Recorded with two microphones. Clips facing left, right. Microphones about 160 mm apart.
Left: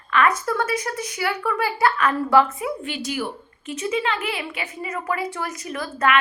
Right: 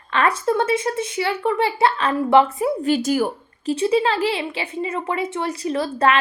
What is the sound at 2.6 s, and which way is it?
A woman's voice, 40° right (ahead or behind).